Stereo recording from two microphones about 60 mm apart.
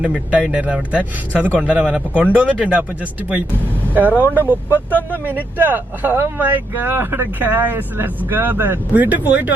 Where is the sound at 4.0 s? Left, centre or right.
Right.